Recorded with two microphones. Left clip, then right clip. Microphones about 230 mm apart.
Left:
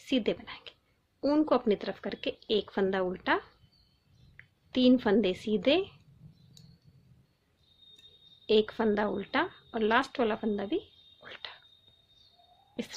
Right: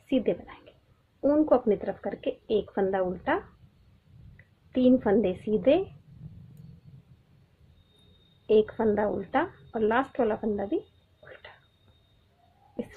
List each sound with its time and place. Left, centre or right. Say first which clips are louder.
0.1 s a woman's voice: right 3 dB; left
4.4 s a sound: left 5 dB; left
4.7 s a woman's voice: right 2 dB; left
8.4 s a woman's voice: right 3 dB; left